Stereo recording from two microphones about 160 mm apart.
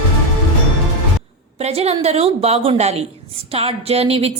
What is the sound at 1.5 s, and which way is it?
A woman's voice, 40° right (ahead or behind).